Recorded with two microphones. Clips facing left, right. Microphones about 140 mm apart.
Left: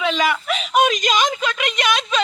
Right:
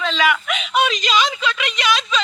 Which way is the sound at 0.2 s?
35° left (ahead or behind).